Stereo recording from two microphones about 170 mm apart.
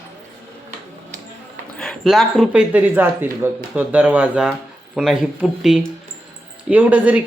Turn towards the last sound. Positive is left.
turn(degrees=-10)  # may be behind; listen again after turning